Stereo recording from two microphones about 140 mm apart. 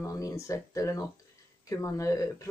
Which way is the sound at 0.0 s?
25° left (ahead or behind).